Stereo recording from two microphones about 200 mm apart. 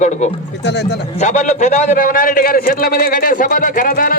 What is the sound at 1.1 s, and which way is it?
A man's voice, 35° left (ahead or behind).